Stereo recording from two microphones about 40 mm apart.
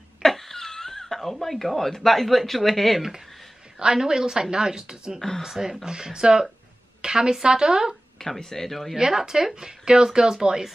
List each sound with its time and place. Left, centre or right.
0.2 s a sound: centre
1.7 s speech: centre
3.8 s a woman's voice: centre
8.2 s speech: centre
8.9 s speech: centre